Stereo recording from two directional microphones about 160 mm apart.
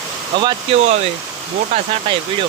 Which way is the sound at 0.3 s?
35° right (ahead or behind).